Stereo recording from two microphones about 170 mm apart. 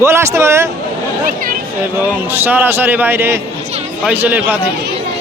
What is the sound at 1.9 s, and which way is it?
A man's voice, 10° right (ahead or behind).